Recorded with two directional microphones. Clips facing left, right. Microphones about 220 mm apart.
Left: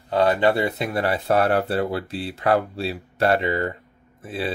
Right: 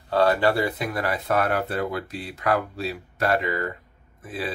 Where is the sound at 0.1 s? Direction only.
20° left (ahead or behind).